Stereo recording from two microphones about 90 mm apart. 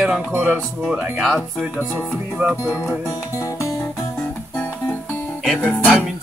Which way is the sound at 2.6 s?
30° left (ahead or behind).